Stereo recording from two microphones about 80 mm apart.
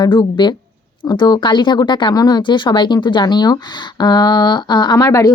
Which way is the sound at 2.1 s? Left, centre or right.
Left.